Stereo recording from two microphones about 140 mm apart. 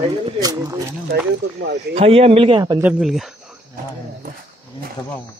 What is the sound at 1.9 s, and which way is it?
Speech, 45° right (ahead or behind).